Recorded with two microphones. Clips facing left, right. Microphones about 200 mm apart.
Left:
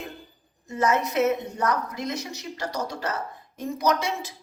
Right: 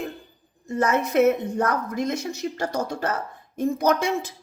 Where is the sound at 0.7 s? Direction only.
55° right (ahead or behind).